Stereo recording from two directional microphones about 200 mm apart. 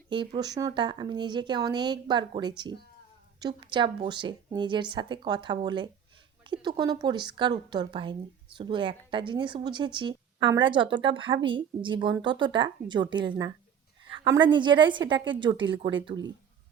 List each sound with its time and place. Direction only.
0.1 s a woman's voice: 25° right (ahead or behind)
14.3 s a woman's voice: 25° right (ahead or behind)